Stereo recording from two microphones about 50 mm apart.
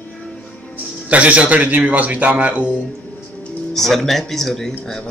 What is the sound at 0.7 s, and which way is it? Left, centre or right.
A man's voice, right.